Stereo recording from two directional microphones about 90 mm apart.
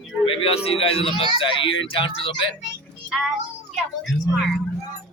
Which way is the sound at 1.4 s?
75° left (ahead or behind).